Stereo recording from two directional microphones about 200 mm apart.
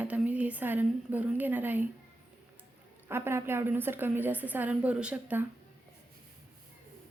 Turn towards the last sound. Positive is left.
turn(degrees=-10)  # may be behind; listen again after turning